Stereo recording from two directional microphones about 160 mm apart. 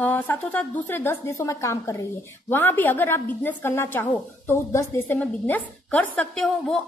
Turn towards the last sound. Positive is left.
turn(degrees=5)  # may be behind; listen again after turning